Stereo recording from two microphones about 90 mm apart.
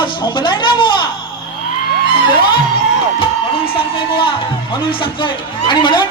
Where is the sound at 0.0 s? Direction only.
60° left (ahead or behind).